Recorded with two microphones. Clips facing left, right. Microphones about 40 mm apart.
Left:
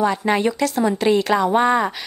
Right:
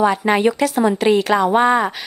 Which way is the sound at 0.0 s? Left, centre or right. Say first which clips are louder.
Right 3 dB; centre.